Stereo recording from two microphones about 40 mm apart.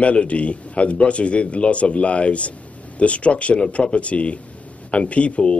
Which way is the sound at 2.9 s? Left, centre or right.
Left.